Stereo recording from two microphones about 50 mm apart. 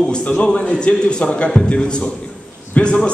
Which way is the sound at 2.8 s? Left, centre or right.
Left.